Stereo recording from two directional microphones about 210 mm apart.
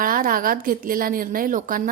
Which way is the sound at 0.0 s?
40° right (ahead or behind).